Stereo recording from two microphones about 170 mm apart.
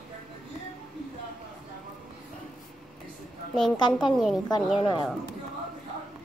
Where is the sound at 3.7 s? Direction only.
25° left (ahead or behind).